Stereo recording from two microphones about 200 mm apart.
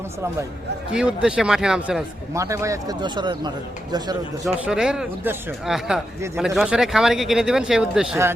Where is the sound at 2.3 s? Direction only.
15° right (ahead or behind).